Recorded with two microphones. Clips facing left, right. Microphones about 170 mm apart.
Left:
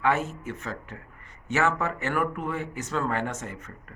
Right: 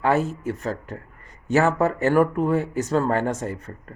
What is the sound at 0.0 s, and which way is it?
Speech, 35° right (ahead or behind).